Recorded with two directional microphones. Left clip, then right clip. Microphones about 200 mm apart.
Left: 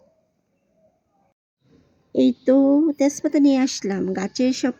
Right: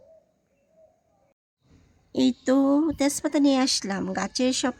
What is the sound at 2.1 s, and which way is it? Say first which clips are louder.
Speech: left 5 dB; 15° right (ahead or behind).